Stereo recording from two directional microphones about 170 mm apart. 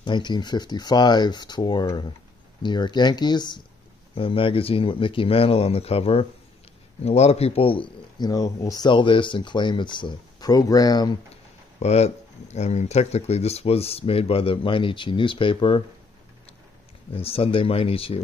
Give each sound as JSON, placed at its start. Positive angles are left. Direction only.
{"t": 0.0, "sound": "speech", "side_deg": 25}
{"t": 11.8, "sound": "speech", "side_deg": 40}
{"t": 17.1, "sound": "speech", "side_deg": 35}